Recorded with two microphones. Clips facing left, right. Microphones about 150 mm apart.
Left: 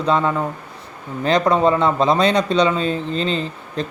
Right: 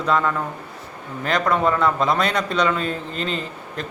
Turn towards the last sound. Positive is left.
turn(degrees=25)  # may be behind; listen again after turning